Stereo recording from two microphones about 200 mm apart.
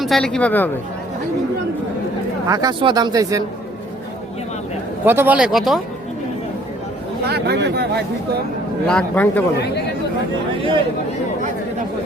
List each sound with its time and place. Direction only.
0.0 s speech: centre (ahead or behind)
2.5 s speech: 20° right (ahead or behind)
5.0 s speech: 10° right (ahead or behind)
7.3 s speech: 55° right (ahead or behind)
8.9 s speech: 5° left (ahead or behind)